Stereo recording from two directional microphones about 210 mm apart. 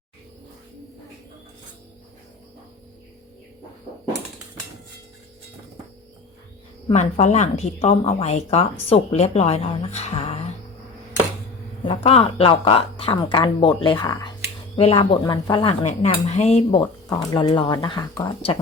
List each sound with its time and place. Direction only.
6.9 s speech: 35° left (ahead or behind)
12.0 s speech: 25° left (ahead or behind)